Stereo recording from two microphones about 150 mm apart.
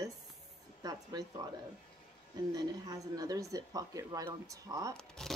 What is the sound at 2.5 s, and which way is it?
A woman's voice, 25° right (ahead or behind).